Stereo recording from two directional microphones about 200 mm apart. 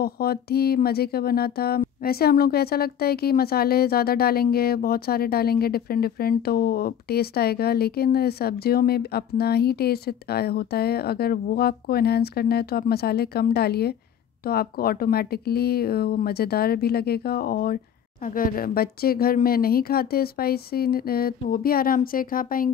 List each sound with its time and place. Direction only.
0.0 s speech: 50° left (ahead or behind)